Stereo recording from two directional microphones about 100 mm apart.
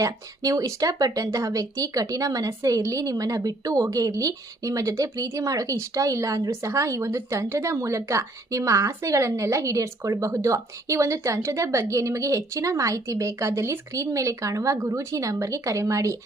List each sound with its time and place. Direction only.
0.0 s speech: 35° right (ahead or behind)